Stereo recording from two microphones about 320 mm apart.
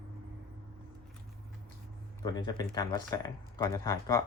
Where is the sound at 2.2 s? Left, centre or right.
Centre.